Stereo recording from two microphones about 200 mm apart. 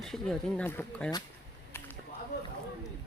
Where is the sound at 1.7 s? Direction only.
10° left (ahead or behind).